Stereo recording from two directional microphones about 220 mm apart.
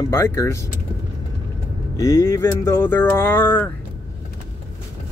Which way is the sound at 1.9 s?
15° left (ahead or behind).